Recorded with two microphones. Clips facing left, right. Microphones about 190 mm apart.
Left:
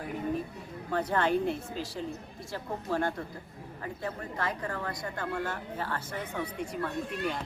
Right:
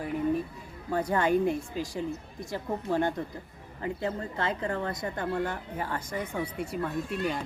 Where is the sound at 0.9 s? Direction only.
10° right (ahead or behind).